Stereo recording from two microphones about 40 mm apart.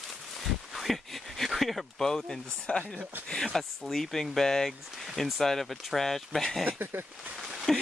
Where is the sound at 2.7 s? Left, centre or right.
Left.